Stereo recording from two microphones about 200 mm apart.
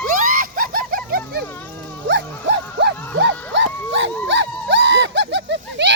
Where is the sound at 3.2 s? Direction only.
65° right (ahead or behind).